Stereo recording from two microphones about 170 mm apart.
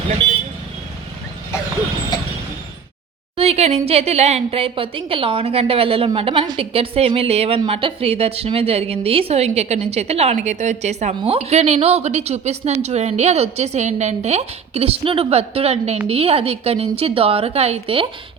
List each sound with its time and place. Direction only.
3.3 s a woman's voice: 35° right (ahead or behind)
11.1 s a woman's voice: 30° right (ahead or behind)